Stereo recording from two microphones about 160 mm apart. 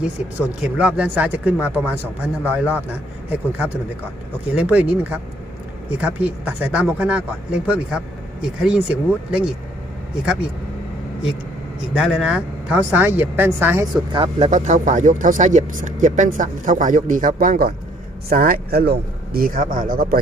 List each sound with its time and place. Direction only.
0.3 s a man's voice: 10° right (ahead or behind)
11.9 s a man's voice: 5° right (ahead or behind)
14.1 s speech: 35° right (ahead or behind); by 20.1 s 60° right (ahead or behind)